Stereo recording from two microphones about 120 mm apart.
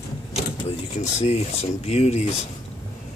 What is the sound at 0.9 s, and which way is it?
Speech, 65° left (ahead or behind).